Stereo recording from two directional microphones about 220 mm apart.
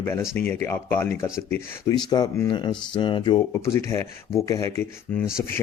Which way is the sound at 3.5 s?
10° left (ahead or behind).